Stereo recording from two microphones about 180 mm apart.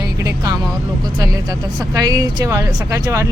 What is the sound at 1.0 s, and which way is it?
Speech, 20° right (ahead or behind).